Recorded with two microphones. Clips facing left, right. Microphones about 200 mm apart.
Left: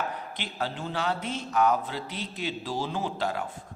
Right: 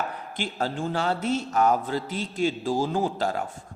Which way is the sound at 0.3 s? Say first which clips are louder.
Right 8 dB; 45° right (ahead or behind).